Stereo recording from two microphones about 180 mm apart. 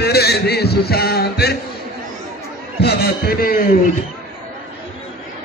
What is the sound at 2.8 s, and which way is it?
Speech, 55° left (ahead or behind).